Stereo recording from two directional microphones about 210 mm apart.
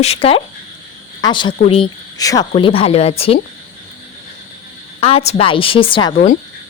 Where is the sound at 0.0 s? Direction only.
30° left (ahead or behind).